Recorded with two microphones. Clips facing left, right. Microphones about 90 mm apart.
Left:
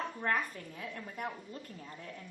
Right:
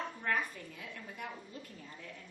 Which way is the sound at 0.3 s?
45° left (ahead or behind).